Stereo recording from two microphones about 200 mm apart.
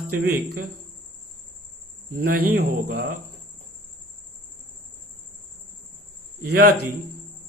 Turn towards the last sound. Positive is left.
turn(degrees=-55)  # may be behind; listen again after turning